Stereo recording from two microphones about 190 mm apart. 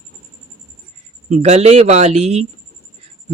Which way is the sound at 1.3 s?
35° right (ahead or behind).